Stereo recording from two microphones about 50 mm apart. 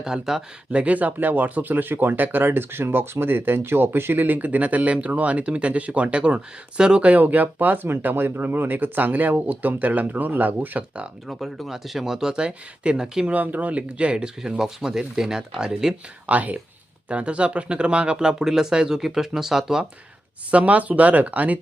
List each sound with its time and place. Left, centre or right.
0.0 s speech: centre
0.7 s speech: right
7.1 s speech: right
11.3 s speech: centre
13.3 s speech: right; by 16.0 s centre
16.2 s speech: right; by 19.8 s centre
20.5 s speech: right